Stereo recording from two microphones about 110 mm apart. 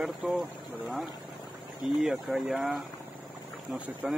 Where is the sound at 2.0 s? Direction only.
Centre (ahead or behind).